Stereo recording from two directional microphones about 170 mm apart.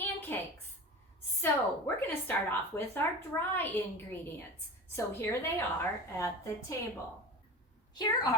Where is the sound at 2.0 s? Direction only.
10° left (ahead or behind).